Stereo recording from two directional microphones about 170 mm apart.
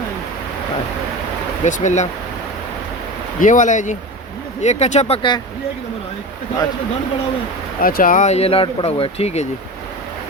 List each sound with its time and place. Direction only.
1.6 s speech: 45° left (ahead or behind)
3.4 s speech: 50° left (ahead or behind); by 5.4 s 30° left (ahead or behind)
7.8 s speech: 55° left (ahead or behind); by 9.5 s 40° left (ahead or behind)